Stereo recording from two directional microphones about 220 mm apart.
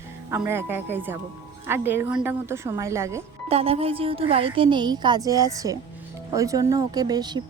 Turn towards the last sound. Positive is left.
turn(degrees=-20)  # may be behind; listen again after turning